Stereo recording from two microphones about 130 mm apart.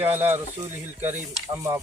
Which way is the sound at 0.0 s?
15° right (ahead or behind).